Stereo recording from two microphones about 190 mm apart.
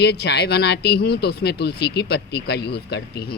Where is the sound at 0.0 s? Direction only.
60° left (ahead or behind).